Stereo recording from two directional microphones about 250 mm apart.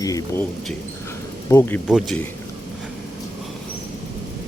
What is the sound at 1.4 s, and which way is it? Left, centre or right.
Speech, centre.